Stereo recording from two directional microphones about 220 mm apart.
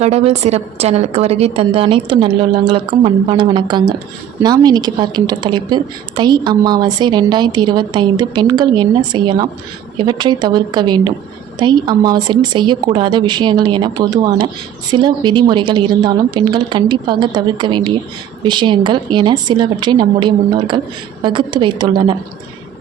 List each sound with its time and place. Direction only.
0.0 s a woman's voice: 30° right (ahead or behind)